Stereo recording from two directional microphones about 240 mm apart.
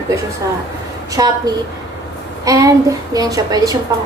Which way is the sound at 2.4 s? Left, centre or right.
Centre.